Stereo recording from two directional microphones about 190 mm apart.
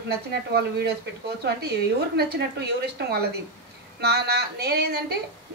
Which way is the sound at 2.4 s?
60° right (ahead or behind).